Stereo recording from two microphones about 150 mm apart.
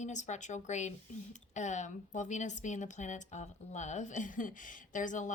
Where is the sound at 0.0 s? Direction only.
50° left (ahead or behind).